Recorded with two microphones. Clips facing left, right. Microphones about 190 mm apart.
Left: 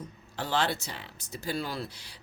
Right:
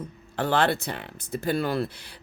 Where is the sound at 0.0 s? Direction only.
55° right (ahead or behind).